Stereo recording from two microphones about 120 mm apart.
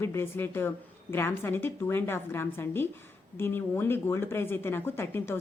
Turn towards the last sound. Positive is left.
turn(degrees=20)  # may be behind; listen again after turning